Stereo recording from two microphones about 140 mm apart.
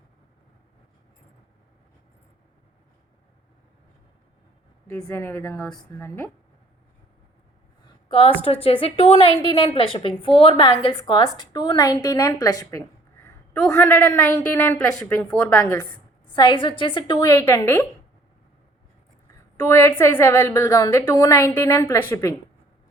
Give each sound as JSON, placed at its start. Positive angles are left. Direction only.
{"t": 5.1, "sound": "a woman's voice", "side_deg": 15}
{"t": 8.6, "sound": "a woman's voice", "side_deg": 40}
{"t": 16.2, "sound": "a woman's voice", "side_deg": 35}
{"t": 17.2, "sound": "a woman's voice", "side_deg": 20}
{"t": 19.5, "sound": "a woman's voice", "side_deg": 20}